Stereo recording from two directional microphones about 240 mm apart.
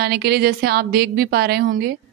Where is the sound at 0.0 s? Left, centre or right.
Right.